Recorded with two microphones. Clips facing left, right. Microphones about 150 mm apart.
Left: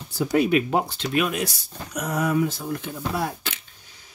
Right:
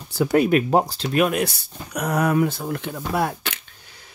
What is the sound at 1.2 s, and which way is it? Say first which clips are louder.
Speech: right 5 dB; 60° right (ahead or behind).